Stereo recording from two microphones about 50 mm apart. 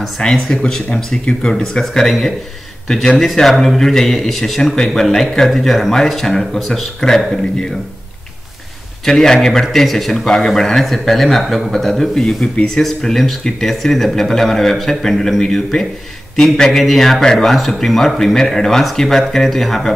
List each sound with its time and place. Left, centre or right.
0.2 s a man's voice: centre
9.0 s a man's voice: centre
12.8 s a man's voice: centre